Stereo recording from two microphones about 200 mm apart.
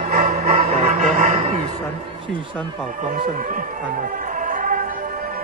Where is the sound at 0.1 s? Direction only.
40° right (ahead or behind).